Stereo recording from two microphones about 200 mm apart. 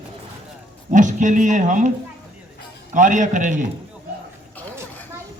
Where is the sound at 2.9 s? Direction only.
40° right (ahead or behind).